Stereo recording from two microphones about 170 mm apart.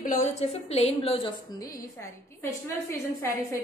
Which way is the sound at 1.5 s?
15° left (ahead or behind).